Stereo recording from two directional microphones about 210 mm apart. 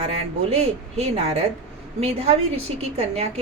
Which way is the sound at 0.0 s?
30° right (ahead or behind).